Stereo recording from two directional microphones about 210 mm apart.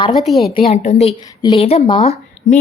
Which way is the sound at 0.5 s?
30° left (ahead or behind).